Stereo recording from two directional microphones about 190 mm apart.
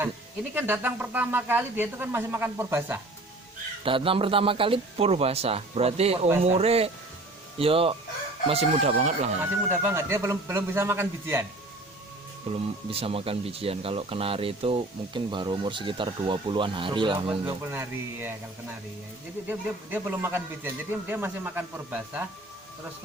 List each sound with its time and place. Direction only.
0.5 s speech: 10° right (ahead or behind)
3.8 s a man's voice: 30° right (ahead or behind)
9.6 s speech: 10° right (ahead or behind)
12.5 s speech: 30° right (ahead or behind)
17.4 s speech: 10° right (ahead or behind)
19.5 s speech: 10° right (ahead or behind)